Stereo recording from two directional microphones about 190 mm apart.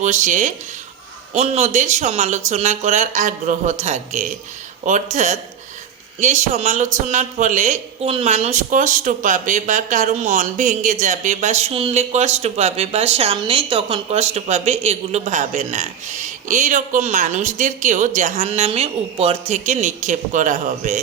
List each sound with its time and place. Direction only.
0.0 s speech: 40° right (ahead or behind)